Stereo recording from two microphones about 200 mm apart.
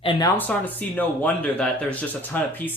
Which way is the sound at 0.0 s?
25° left (ahead or behind).